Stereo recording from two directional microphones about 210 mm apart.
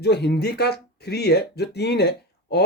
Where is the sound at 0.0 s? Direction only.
50° left (ahead or behind).